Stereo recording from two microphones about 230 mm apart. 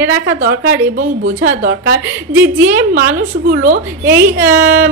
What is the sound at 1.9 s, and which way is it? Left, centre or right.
Speech, centre.